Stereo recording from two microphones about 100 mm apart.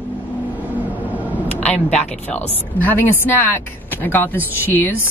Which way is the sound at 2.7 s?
20° left (ahead or behind).